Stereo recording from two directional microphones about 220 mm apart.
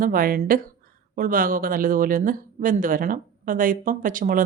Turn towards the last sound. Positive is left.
turn(degrees=-40)  # may be behind; listen again after turning